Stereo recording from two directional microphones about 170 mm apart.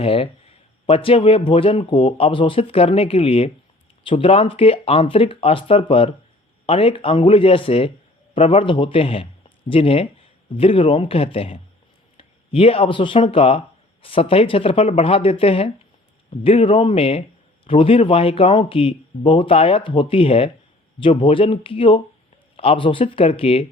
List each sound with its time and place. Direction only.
0.0 s speech: 35° left (ahead or behind)